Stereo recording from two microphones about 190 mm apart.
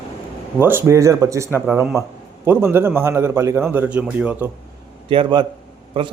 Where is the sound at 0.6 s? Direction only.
10° right (ahead or behind).